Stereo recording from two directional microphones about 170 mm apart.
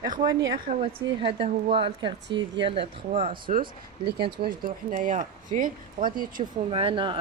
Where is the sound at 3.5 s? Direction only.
55° right (ahead or behind).